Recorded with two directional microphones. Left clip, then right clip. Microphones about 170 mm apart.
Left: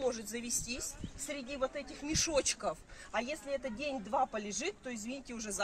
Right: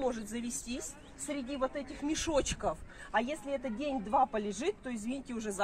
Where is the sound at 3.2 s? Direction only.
20° left (ahead or behind).